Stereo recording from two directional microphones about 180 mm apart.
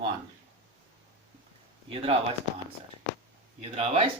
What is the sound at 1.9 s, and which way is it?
Speech, 30° right (ahead or behind).